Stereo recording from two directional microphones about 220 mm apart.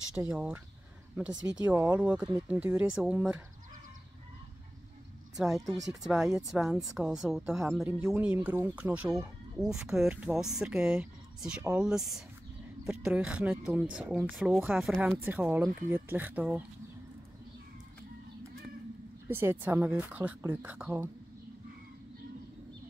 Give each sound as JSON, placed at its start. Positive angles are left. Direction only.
{"t": 0.1, "sound": "a woman's voice", "side_deg": -10}
{"t": 1.6, "sound": "a woman's voice", "side_deg": -5}
{"t": 5.4, "sound": "a woman's voice", "side_deg": 0}
{"t": 19.2, "sound": "a woman's voice", "side_deg": -10}